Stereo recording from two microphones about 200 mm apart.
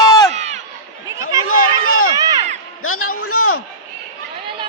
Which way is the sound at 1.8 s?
90° left.